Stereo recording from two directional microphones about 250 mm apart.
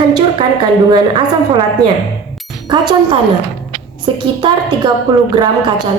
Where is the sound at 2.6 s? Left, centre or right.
Centre.